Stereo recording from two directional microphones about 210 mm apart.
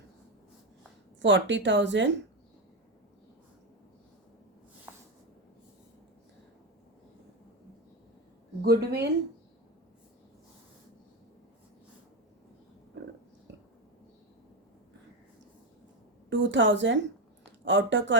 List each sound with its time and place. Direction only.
1.2 s speech: 60° right (ahead or behind)
8.6 s speech: 50° right (ahead or behind)
16.3 s speech: 60° right (ahead or behind)